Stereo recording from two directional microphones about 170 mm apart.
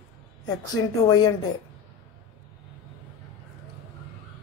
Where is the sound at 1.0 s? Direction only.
25° left (ahead or behind).